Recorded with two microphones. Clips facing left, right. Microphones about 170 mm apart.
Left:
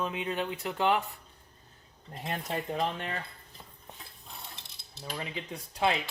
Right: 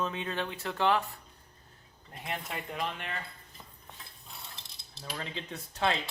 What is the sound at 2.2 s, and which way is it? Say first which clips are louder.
Speech: left 4 dB; 40° left (ahead or behind).